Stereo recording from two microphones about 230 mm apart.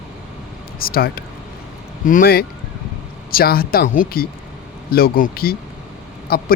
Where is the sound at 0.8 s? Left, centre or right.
Left.